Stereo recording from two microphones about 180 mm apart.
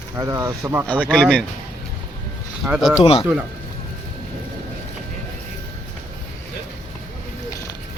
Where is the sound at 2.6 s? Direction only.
5° right (ahead or behind).